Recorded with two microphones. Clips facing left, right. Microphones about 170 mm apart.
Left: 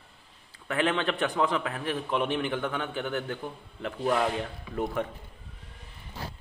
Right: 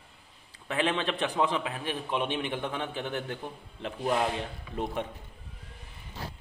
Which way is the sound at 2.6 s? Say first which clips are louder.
Left 2 dB; 25° right (ahead or behind).